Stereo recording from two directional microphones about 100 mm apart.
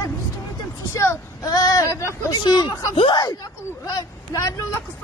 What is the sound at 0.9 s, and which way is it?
Speech, 30° left (ahead or behind).